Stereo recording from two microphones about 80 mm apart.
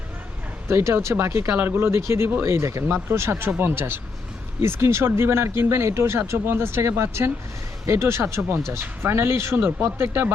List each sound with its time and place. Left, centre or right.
0.7 s speech: right